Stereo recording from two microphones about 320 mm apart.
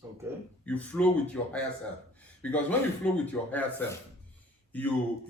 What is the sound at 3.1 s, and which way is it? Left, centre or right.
Speech, centre.